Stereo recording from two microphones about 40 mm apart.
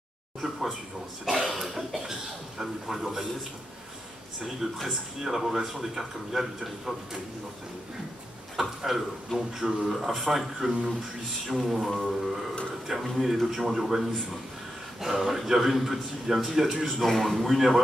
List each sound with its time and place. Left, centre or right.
1.2 s a man's voice: centre
4.6 s a man's voice: centre
8.5 s a man's voice: centre
17.0 s speech: centre